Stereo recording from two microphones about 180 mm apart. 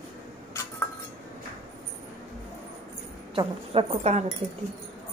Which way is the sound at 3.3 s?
30° right (ahead or behind).